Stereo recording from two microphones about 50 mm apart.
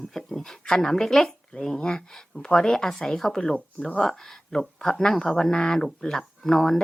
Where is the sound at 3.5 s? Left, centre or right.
Left.